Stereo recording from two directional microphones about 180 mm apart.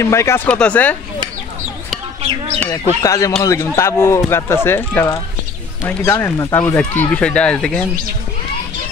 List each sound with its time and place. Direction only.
0.0 s speech: 15° left (ahead or behind)
2.2 s bird: 35° right (ahead or behind)
3.0 s speech: 15° left (ahead or behind)